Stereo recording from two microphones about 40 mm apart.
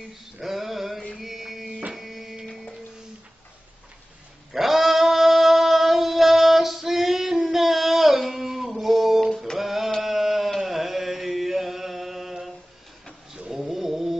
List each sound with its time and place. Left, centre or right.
0.4 s male singing: centre
1.2 s music: centre
2.0 s printer: centre
4.5 s goat: centre
5.0 s music: centre
7.5 s a sound: centre
10.6 s chant: centre
13.5 s a sound: centre